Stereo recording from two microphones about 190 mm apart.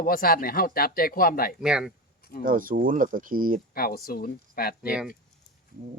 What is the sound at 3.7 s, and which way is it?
Speech, 50° left (ahead or behind).